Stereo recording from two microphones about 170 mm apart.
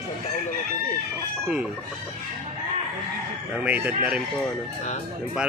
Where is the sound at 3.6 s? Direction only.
10° right (ahead or behind).